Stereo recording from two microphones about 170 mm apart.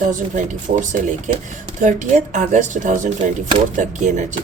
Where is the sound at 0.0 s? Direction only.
50° right (ahead or behind).